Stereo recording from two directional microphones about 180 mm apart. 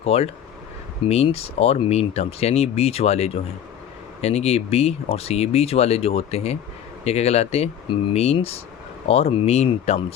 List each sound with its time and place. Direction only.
0.0 s speech: 35° left (ahead or behind)